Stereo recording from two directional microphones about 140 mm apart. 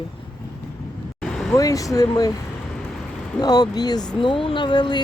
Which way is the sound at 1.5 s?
25° left (ahead or behind).